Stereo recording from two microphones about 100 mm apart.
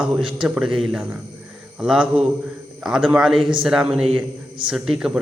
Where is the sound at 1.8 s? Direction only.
5° right (ahead or behind).